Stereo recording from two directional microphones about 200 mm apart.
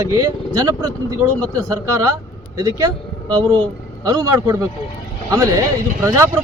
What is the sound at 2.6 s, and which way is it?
A man's voice, 20° right (ahead or behind).